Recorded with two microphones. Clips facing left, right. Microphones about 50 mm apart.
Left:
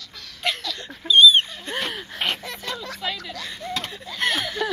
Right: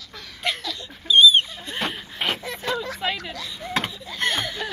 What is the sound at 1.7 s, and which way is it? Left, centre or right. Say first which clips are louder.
Rodents: left 2 dB; left.